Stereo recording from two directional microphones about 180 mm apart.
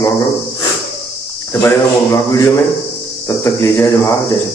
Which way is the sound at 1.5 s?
15° left (ahead or behind).